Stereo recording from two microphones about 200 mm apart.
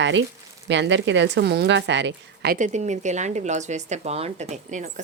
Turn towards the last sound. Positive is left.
turn(degrees=-35)  # may be behind; listen again after turning